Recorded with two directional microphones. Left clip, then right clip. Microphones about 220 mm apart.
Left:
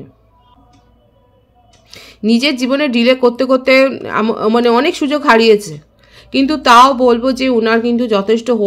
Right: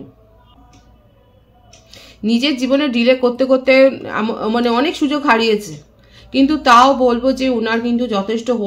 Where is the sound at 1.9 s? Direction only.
50° left (ahead or behind).